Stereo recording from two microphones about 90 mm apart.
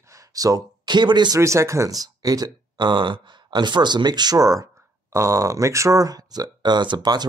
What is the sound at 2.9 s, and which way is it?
Speech, 65° right (ahead or behind).